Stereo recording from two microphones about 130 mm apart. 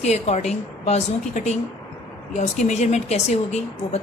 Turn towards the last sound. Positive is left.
turn(degrees=55)  # may be behind; listen again after turning